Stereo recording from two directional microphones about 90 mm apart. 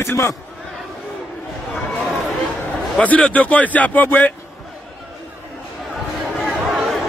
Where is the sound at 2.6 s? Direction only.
15° left (ahead or behind).